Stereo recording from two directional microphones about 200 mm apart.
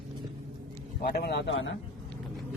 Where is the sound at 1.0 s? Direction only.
50° left (ahead or behind); by 1.8 s 70° left (ahead or behind).